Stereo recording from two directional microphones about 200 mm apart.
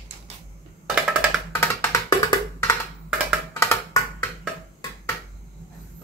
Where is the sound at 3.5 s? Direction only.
15° left (ahead or behind).